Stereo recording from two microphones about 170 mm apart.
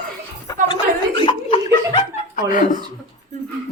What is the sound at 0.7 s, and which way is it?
Speech, 30° left (ahead or behind).